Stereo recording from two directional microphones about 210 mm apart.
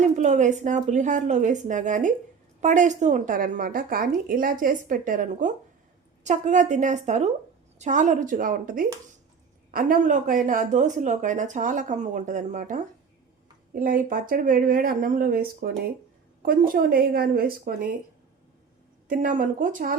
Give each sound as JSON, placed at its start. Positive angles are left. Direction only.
{"t": 0.0, "sound": "a woman's voice", "side_deg": -35}
{"t": 19.0, "sound": "speech", "side_deg": -40}